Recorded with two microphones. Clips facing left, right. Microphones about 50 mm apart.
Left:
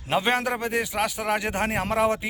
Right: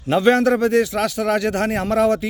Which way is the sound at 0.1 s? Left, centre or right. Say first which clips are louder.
Right 8 dB; centre.